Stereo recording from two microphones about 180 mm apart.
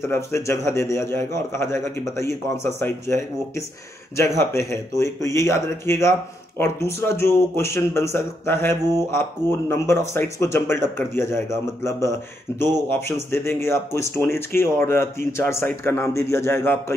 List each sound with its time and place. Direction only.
0.1 s speech: 15° left (ahead or behind)
12.9 s speech: 15° left (ahead or behind)